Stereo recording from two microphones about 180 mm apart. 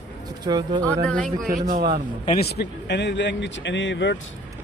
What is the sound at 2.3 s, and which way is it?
Speech, 65° left (ahead or behind).